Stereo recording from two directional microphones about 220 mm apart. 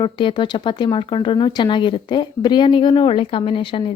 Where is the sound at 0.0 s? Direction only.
20° left (ahead or behind).